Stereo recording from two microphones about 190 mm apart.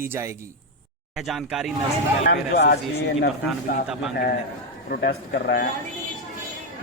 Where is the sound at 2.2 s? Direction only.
60° left (ahead or behind).